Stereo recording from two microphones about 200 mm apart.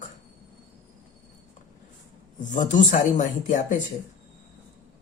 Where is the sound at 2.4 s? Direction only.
40° left (ahead or behind).